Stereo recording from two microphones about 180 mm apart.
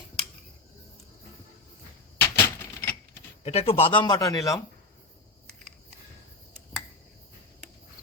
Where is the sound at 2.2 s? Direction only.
10° left (ahead or behind).